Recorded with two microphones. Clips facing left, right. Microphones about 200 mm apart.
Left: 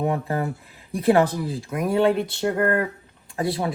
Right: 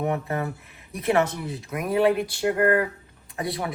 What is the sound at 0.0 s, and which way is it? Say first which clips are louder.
Speech: left 2 dB; 30° left (ahead or behind).